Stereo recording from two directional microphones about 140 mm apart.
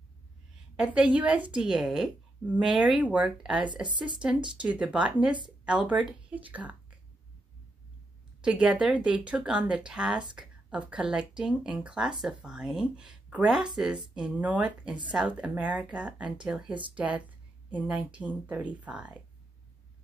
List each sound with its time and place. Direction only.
0.7 s speech: 5° right (ahead or behind)
3.8 s speech: 35° right (ahead or behind)
4.6 s speech: 10° right (ahead or behind)
8.4 s speech: 5° right (ahead or behind)